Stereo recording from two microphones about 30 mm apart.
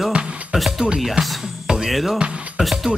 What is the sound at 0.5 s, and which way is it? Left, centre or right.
Speech, right.